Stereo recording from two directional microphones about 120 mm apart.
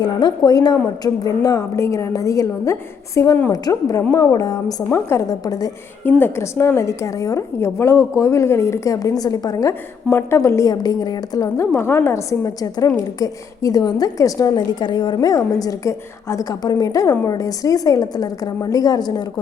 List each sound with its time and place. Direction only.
0.0 s a woman's voice: 35° left (ahead or behind)
6.1 s a woman's voice: 15° left (ahead or behind); by 19.2 s 35° left (ahead or behind)